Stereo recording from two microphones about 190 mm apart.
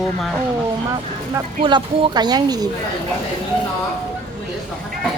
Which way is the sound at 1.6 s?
25° right (ahead or behind).